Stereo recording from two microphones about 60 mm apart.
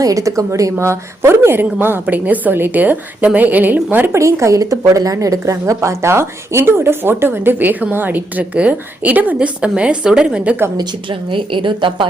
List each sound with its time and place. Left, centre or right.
0.0 s a woman's voice: right
4.1 s speech: right
4.6 s a woman's voice: right; by 10.5 s centre